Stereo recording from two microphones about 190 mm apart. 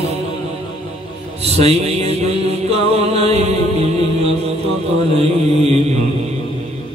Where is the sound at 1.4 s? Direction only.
35° right (ahead or behind).